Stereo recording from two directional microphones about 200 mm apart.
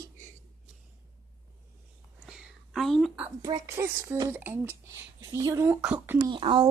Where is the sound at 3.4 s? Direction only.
15° right (ahead or behind).